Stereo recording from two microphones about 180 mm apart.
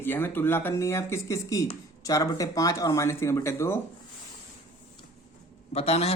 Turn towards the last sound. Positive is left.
turn(degrees=35)  # may be behind; listen again after turning